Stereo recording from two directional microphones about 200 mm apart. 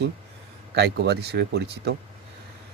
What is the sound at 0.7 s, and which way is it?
A man's voice, 55° right (ahead or behind).